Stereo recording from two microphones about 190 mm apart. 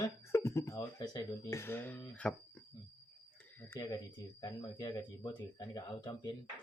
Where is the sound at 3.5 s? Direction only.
15° left (ahead or behind).